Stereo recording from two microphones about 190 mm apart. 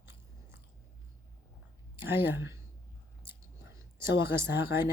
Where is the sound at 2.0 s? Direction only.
10° right (ahead or behind).